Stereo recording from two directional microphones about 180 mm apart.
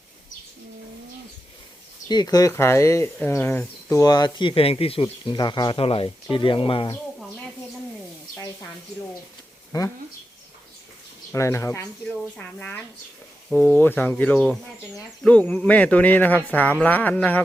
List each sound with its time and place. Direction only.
2.0 s speech: 20° left (ahead or behind)
11.3 s speech: 15° left (ahead or behind)